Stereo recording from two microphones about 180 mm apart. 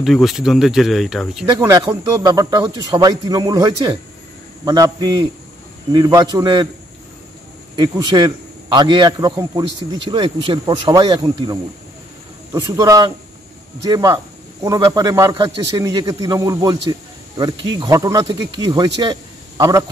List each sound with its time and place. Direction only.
0.0 s speech: centre (ahead or behind)
1.6 s a man's voice: 15° right (ahead or behind)
7.7 s a man's voice: 25° right (ahead or behind)
12.5 s a man's voice: 20° right (ahead or behind)